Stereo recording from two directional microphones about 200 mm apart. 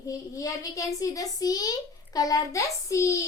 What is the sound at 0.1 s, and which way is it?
A child's voice, 15° left (ahead or behind).